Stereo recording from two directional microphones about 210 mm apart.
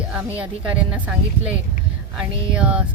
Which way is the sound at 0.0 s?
5° right (ahead or behind).